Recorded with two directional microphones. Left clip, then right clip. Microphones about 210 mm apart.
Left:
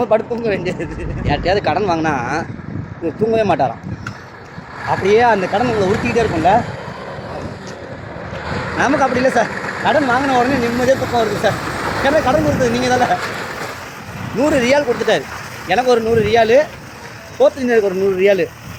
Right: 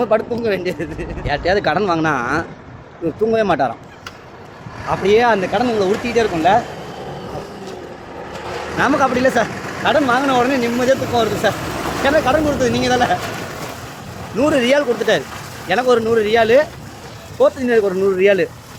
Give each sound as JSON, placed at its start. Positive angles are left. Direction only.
{"t": 0.0, "sound": "speech", "side_deg": 5}
{"t": 4.9, "sound": "speech", "side_deg": 10}
{"t": 8.8, "sound": "speech", "side_deg": 10}
{"t": 9.5, "sound": "vehicle", "side_deg": -45}
{"t": 9.8, "sound": "speech", "side_deg": 10}
{"t": 14.3, "sound": "speech", "side_deg": 10}